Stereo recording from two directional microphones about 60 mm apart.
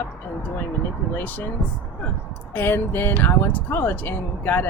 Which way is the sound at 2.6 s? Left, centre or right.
Left.